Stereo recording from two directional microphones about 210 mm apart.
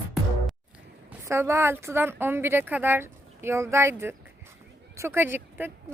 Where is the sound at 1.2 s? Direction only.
10° right (ahead or behind).